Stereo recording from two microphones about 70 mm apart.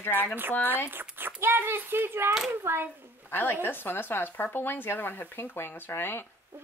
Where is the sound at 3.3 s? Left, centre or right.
Left.